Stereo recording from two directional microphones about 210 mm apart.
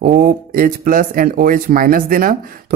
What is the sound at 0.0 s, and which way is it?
Speech, 40° right (ahead or behind).